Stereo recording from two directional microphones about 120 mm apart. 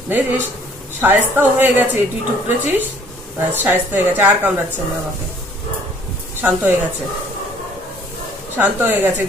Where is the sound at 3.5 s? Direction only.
15° right (ahead or behind).